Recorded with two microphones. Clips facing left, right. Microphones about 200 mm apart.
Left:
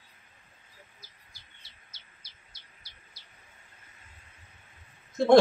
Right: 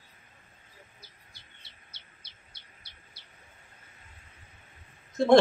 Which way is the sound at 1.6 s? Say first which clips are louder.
Right 2 dB; 60° right (ahead or behind).